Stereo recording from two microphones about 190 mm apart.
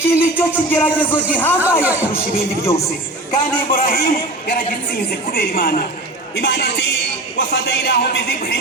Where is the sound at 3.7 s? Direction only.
55° left (ahead or behind).